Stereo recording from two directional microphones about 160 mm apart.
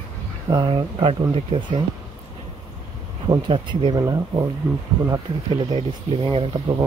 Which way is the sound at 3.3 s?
30° right (ahead or behind).